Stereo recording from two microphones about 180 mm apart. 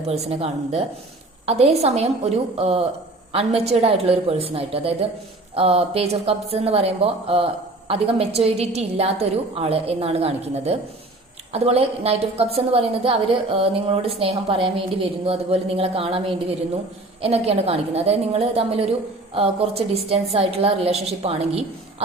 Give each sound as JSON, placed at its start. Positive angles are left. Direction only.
{"t": 0.1, "sound": "a woman's voice", "side_deg": -35}